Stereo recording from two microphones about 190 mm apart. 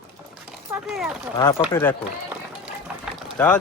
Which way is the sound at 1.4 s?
20° left (ahead or behind).